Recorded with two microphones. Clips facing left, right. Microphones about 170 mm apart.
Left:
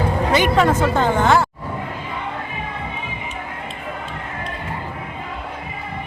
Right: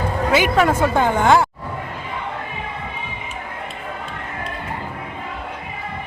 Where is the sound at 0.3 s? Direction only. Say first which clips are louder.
Even; 5° right (ahead or behind).